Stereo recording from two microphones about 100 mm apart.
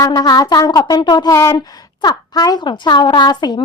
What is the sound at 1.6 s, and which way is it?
A woman's voice, 45° left (ahead or behind).